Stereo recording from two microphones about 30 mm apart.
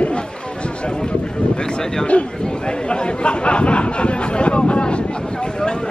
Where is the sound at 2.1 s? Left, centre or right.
Left.